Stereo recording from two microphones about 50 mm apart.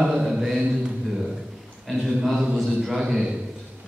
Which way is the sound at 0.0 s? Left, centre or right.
Centre.